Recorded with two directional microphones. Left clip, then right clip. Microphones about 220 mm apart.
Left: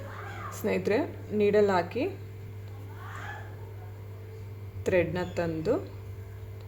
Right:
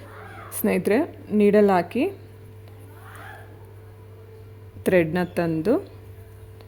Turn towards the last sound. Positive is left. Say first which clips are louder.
# right 6 dB
turn(degrees=-50)  # may be behind; listen again after turning